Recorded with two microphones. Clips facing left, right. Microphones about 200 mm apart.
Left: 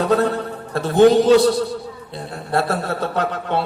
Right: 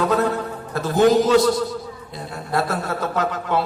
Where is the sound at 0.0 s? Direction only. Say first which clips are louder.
Left 2 dB; 30° left (ahead or behind).